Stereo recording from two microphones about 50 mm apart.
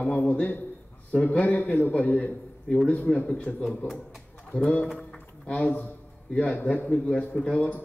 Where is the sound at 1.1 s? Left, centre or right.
Left.